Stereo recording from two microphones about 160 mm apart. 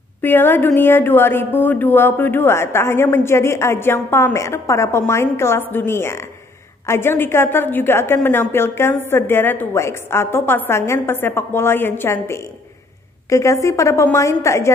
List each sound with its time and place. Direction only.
0.2 s a woman's voice: 15° left (ahead or behind)